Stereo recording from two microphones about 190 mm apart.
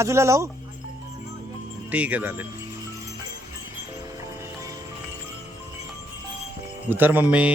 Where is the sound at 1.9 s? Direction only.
10° right (ahead or behind).